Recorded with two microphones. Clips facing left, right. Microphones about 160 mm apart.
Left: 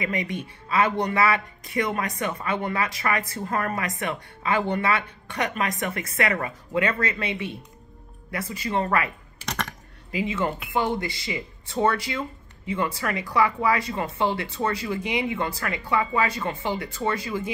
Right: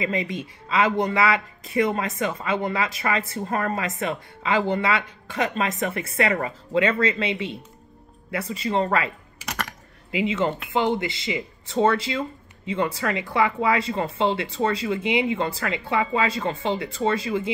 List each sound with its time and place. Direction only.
0.0 s speech: 25° right (ahead or behind)
9.4 s typing: 10° right (ahead or behind)
10.1 s speech: 25° right (ahead or behind)